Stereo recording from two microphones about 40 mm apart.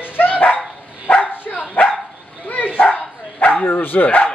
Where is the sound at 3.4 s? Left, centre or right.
Left.